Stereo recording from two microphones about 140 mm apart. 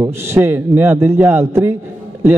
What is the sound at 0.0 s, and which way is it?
A man's voice, 15° right (ahead or behind).